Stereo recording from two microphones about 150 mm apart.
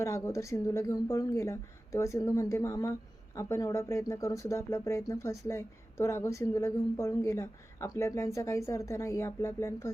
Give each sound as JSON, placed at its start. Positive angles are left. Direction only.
{"t": 0.0, "sound": "speech", "side_deg": 20}